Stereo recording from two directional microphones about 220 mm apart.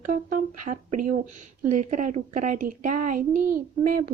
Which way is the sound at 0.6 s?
35° right (ahead or behind).